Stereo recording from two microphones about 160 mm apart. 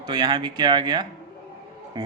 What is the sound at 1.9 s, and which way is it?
Music, 25° right (ahead or behind).